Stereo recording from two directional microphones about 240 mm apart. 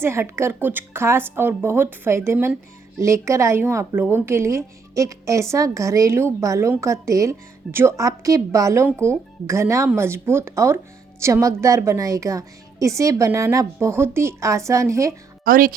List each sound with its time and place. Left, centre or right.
0.0 s a woman's voice: centre
15.4 s speech: right